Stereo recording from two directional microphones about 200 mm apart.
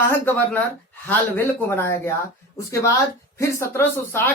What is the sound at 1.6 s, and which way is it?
Speech, 10° left (ahead or behind).